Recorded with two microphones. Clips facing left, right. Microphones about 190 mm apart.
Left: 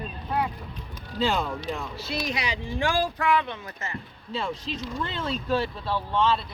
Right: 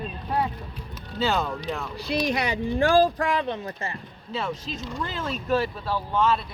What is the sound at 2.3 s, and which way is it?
Speech, 55° right (ahead or behind).